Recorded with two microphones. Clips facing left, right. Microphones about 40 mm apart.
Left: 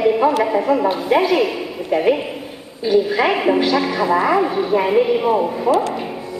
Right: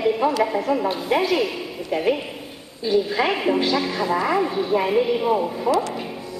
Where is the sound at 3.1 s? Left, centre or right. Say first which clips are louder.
Left 4 dB; left.